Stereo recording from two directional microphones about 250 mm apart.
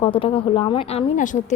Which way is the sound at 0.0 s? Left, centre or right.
Left.